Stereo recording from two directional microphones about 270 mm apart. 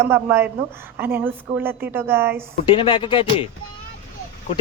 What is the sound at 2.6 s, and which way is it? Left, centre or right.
Speech, centre.